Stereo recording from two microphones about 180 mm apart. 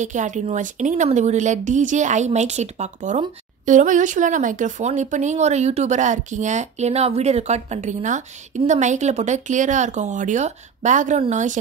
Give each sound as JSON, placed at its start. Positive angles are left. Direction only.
{"t": 0.0, "sound": "speech", "side_deg": -45}